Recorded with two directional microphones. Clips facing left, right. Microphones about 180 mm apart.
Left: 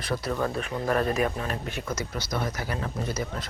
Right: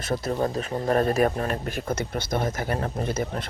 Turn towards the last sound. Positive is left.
turn(degrees=-55)  # may be behind; listen again after turning